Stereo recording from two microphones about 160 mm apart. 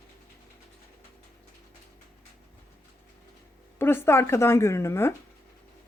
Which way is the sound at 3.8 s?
15° left (ahead or behind).